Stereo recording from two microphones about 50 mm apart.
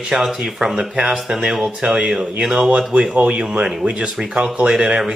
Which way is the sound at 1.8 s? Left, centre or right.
Right.